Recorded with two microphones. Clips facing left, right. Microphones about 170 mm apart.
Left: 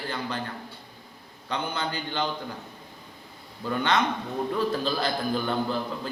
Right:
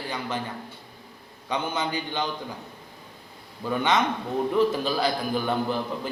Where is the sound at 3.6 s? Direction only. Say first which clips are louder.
Right 1 dB; 15° right (ahead or behind).